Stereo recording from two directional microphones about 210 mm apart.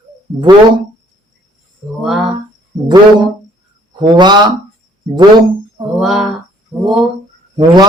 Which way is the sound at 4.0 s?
20° right (ahead or behind).